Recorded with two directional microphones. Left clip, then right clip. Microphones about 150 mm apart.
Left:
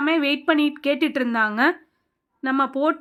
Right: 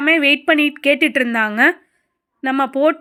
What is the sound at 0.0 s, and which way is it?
A woman's voice, 15° right (ahead or behind).